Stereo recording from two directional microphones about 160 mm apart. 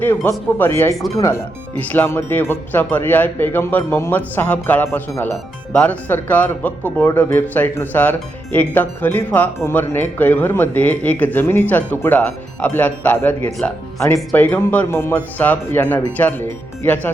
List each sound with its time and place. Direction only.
0.0 s speech: 10° left (ahead or behind)